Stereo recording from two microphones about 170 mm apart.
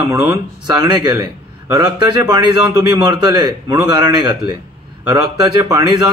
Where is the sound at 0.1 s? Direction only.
25° right (ahead or behind).